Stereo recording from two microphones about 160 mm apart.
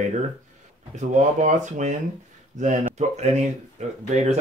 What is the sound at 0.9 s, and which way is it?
Speech, 50° right (ahead or behind).